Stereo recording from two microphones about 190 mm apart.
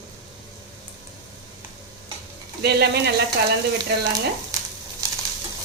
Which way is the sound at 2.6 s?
60° right (ahead or behind).